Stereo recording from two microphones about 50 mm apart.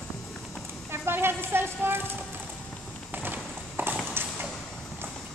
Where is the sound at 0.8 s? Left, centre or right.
Right.